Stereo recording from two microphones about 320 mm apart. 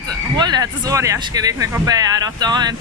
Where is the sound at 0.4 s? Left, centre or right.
Centre.